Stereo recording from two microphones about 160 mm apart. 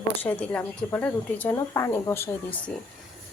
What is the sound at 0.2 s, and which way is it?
Speech, 10° left (ahead or behind).